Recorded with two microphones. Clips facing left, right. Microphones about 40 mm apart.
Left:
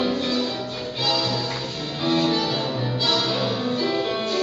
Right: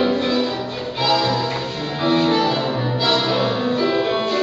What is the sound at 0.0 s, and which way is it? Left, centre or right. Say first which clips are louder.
Music: right 5 dB; centre.